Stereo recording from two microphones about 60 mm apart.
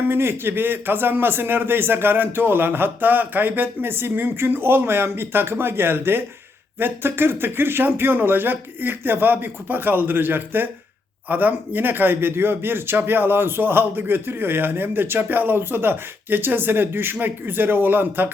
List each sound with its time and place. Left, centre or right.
0.1 s a man's voice: right